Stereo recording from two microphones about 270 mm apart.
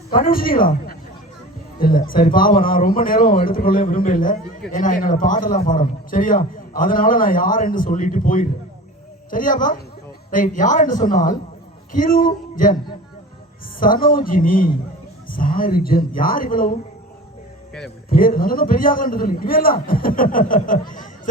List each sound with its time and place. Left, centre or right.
0.2 s a man's voice: left
11.9 s music: left
13.7 s a man's voice: left
18.1 s a man's voice: left